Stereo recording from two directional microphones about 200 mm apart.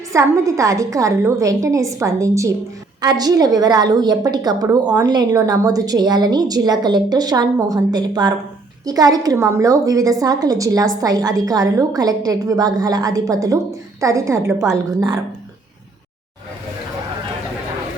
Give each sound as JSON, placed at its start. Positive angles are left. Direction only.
{"t": 0.1, "sound": "a woman's voice", "side_deg": -15}